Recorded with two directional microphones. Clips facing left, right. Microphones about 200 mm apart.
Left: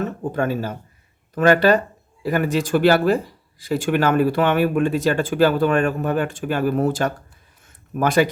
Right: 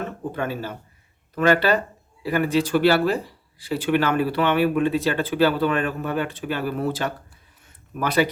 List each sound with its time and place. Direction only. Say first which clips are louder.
0.0 s speech: left 5 dB; 45° left (ahead or behind)